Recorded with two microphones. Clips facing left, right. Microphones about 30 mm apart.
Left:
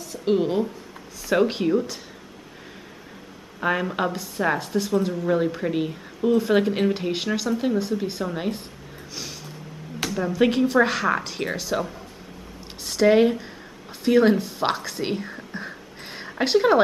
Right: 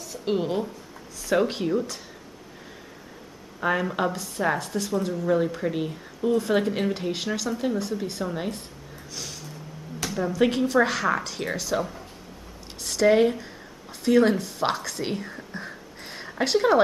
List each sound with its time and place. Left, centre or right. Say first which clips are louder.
0.0 s a woman's voice: left 4 dB; centre
3.6 s a woman's voice: left 1 dB; centre
9.1 s a sound: left 1 dB; centre
10.0 s a woman's voice: left 2 dB; centre